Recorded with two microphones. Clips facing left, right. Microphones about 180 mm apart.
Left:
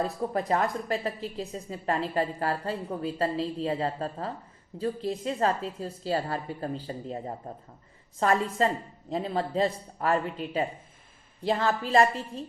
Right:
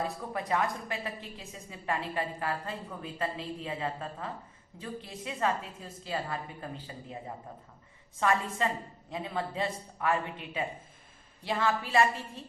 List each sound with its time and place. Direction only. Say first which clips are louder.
0.3 s a woman's voice: left 4 dB; 40° left (ahead or behind)